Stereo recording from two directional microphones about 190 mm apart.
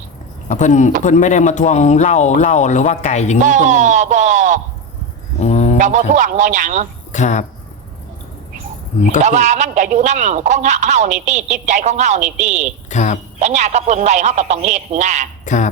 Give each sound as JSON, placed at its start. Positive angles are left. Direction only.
{"t": 0.4, "sound": "speech", "side_deg": 40}
{"t": 3.4, "sound": "speech", "side_deg": -40}
{"t": 5.4, "sound": "a sound", "side_deg": 35}
{"t": 5.8, "sound": "speech", "side_deg": -40}
{"t": 7.1, "sound": "speech", "side_deg": 40}
{"t": 9.2, "sound": "speech", "side_deg": -40}
{"t": 12.9, "sound": "speech", "side_deg": 40}
{"t": 13.4, "sound": "speech", "side_deg": -35}
{"t": 15.4, "sound": "speech", "side_deg": 40}